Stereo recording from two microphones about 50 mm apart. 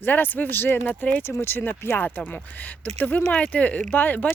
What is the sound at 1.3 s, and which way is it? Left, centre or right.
Speech, left.